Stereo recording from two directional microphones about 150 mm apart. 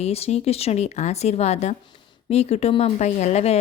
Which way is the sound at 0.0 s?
45° left (ahead or behind).